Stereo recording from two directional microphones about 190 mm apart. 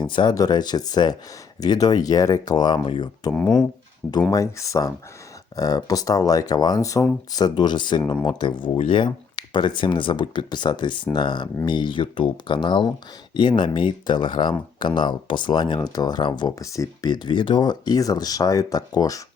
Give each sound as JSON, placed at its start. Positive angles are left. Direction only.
{"t": 0.0, "sound": "speech", "side_deg": 25}
{"t": 3.3, "sound": "speech", "side_deg": 5}
{"t": 4.3, "sound": "speech", "side_deg": 15}